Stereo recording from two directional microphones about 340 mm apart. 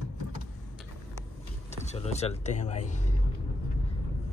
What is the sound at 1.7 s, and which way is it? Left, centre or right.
Speech, centre.